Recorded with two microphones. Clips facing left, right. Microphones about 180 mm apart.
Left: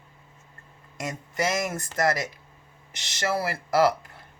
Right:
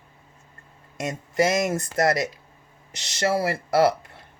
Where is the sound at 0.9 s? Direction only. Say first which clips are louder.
Right 7 dB; 25° right (ahead or behind).